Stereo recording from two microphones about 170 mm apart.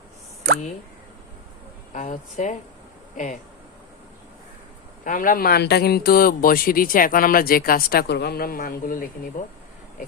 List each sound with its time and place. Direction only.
1.9 s speech: 50° left (ahead or behind)
5.0 s a man's voice: 50° left (ahead or behind)